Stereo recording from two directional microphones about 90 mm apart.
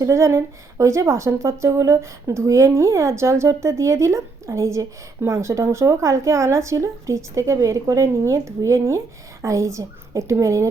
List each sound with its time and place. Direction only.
0.0 s a woman's voice: 30° right (ahead or behind)